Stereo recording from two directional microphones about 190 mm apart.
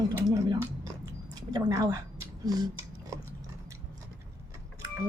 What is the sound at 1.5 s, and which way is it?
Speech, 20° right (ahead or behind).